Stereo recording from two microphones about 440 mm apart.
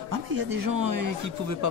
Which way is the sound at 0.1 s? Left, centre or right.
Right.